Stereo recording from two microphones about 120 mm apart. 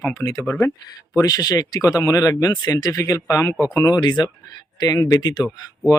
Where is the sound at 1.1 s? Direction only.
30° left (ahead or behind).